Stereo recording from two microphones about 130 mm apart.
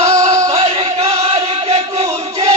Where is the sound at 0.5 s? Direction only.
50° right (ahead or behind).